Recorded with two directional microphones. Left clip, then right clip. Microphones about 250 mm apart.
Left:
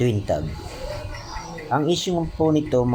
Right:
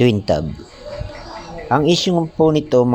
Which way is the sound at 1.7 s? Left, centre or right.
Right.